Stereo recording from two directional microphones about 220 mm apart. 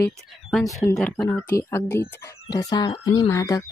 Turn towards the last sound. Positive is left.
turn(degrees=15)  # may be behind; listen again after turning